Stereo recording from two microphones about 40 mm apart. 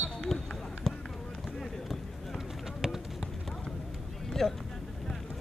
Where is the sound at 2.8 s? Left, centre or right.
Centre.